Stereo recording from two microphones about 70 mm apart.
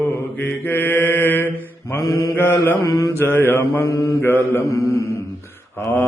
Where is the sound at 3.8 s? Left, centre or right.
Left.